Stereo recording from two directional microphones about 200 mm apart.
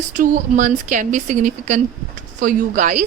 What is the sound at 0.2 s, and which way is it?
A woman's voice, 40° right (ahead or behind).